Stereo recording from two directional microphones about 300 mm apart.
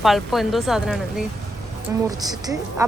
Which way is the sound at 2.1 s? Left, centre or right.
Centre.